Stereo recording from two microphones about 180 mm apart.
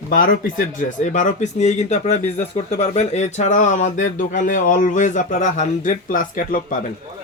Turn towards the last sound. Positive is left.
turn(degrees=50)  # may be behind; listen again after turning